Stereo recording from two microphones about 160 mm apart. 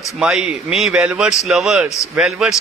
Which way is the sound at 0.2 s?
5° right (ahead or behind).